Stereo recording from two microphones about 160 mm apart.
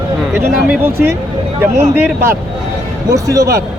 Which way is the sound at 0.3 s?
10° right (ahead or behind).